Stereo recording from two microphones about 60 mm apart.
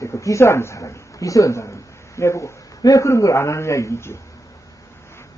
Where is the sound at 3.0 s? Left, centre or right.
Left.